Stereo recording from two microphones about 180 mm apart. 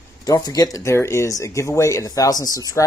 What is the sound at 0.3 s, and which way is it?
Speech, 20° left (ahead or behind).